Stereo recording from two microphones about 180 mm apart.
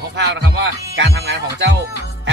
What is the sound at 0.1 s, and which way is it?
Speech, 70° right (ahead or behind).